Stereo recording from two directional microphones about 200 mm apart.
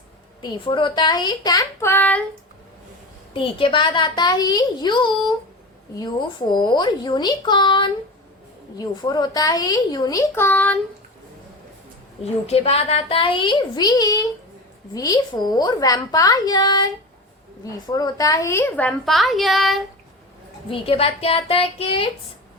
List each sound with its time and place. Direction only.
0.4 s a woman's voice: 25° left (ahead or behind)
3.3 s a woman's voice: 25° left (ahead or behind); by 10.8 s 10° left (ahead or behind)
12.5 s a woman's voice: 30° left (ahead or behind); by 19.8 s centre (ahead or behind)
20.7 s a woman's voice: 25° left (ahead or behind)